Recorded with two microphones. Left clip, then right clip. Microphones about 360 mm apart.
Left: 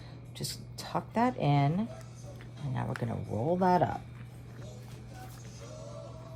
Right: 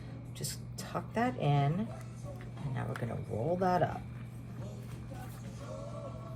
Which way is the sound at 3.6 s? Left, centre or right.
Left.